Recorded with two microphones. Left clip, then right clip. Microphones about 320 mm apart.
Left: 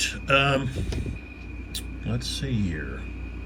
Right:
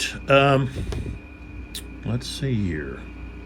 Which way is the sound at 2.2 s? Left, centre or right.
Right.